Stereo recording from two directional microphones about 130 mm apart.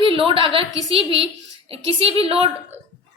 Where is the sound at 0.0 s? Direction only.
45° right (ahead or behind).